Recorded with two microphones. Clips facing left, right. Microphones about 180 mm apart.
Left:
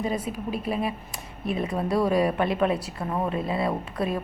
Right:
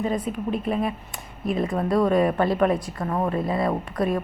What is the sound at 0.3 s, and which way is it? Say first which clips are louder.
A woman's voice: right 3 dB; 5° left (ahead or behind).